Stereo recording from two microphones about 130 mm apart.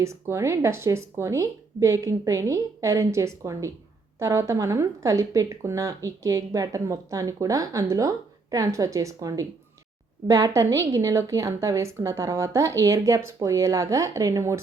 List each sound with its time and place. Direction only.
0.0 s speech: 20° right (ahead or behind)